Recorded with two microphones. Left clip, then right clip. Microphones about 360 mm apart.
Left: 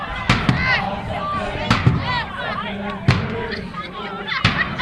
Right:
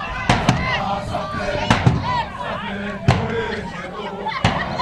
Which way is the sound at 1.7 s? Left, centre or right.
Right.